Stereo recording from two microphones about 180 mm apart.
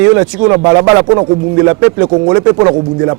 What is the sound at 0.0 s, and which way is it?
Speech, 15° right (ahead or behind).